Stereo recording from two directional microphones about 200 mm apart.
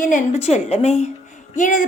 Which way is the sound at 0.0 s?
35° left (ahead or behind).